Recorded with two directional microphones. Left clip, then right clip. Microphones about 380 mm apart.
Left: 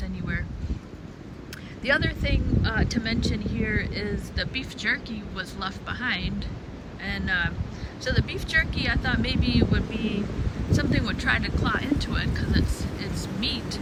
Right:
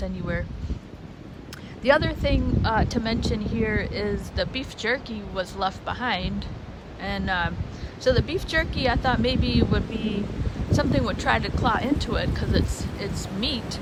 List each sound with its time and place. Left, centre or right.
1.8 s speech: centre